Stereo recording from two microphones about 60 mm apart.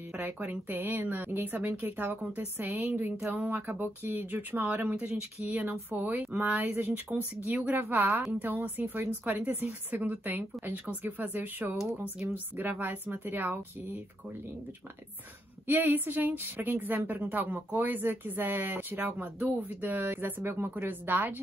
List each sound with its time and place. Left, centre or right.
0.2 s a woman's voice: right
2.6 s a woman's voice: right
3.3 s a woman's voice: right
15.6 s a woman's voice: right